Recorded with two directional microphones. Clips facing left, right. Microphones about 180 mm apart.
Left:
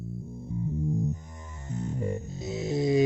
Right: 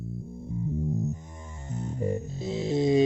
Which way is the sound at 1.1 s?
25° right (ahead or behind).